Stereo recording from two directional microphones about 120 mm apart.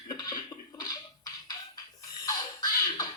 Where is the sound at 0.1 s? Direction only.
35° left (ahead or behind).